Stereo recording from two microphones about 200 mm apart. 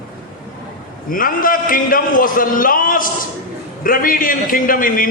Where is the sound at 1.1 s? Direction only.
45° left (ahead or behind).